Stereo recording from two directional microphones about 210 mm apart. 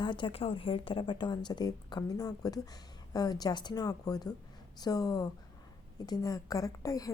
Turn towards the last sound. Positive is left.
turn(degrees=15)  # may be behind; listen again after turning